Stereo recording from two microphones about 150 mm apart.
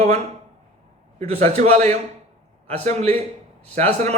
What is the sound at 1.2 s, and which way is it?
A man's voice, 45° right (ahead or behind).